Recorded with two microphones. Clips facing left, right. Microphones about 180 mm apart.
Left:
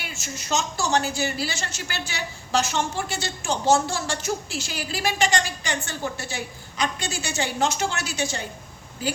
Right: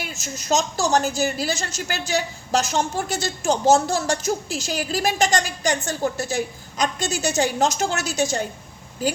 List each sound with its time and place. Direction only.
0.0 s a woman's voice: 40° right (ahead or behind)